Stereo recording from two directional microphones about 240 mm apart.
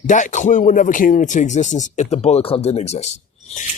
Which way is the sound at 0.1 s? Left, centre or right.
Left.